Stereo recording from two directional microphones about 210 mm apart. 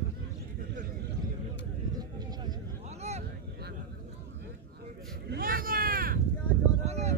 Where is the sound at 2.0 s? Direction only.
20° right (ahead or behind).